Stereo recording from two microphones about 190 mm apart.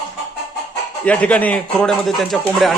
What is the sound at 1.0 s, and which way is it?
Speech, 5° left (ahead or behind).